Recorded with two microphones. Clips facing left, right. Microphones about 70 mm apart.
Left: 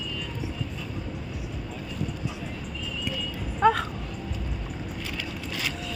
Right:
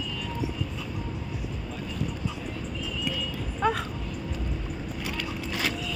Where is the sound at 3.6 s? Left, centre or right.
Left.